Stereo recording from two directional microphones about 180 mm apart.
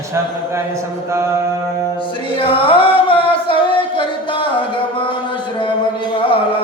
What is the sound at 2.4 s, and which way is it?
Music, 30° left (ahead or behind).